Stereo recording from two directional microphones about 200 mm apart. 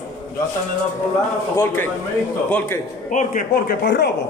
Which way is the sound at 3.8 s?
60° left (ahead or behind).